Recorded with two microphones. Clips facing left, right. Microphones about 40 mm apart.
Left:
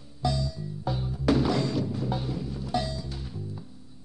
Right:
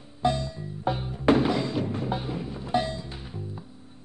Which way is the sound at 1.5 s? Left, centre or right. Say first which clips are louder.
Even; centre.